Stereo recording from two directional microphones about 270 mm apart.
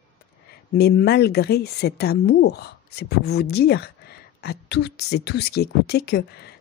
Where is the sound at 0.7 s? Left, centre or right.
Left.